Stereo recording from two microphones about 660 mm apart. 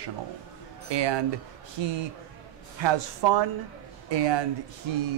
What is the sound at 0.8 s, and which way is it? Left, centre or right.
Speech, right.